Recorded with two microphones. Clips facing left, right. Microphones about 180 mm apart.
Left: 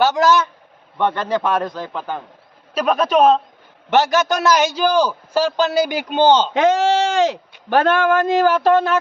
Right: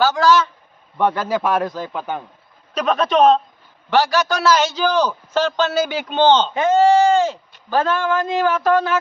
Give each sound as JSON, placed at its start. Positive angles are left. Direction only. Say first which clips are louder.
{"t": 0.0, "sound": "a man's voice", "louder": "even", "side_deg": 20}
{"t": 0.9, "sound": "a man's voice", "louder": "even", "side_deg": -5}
{"t": 2.7, "sound": "a man's voice", "louder": "left 1 dB", "side_deg": 10}
{"t": 3.8, "sound": "a man's voice", "louder": "left 1 dB", "side_deg": 20}
{"t": 6.5, "sound": "speech", "louder": "right 1 dB", "side_deg": 85}
{"t": 8.4, "sound": "speech", "louder": "even", "side_deg": 35}